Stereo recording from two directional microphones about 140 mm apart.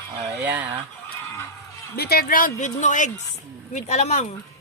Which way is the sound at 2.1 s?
90° left.